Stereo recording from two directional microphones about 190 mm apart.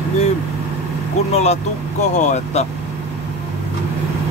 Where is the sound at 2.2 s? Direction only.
35° left (ahead or behind).